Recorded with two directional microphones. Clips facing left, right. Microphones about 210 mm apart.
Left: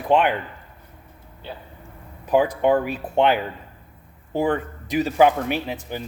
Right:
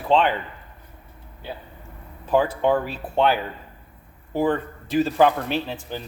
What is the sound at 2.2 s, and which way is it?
Speech, 15° left (ahead or behind).